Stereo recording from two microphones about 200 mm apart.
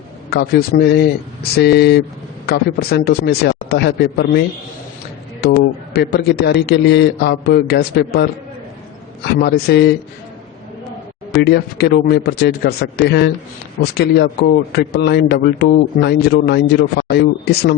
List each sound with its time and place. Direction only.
0.3 s a man's voice: 55° left (ahead or behind)
11.4 s a man's voice: 55° left (ahead or behind)